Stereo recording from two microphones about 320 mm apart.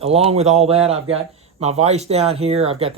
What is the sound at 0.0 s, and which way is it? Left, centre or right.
A man's voice, centre.